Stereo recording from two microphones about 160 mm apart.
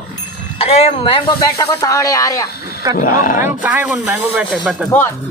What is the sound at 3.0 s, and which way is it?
Speech, 60° left (ahead or behind).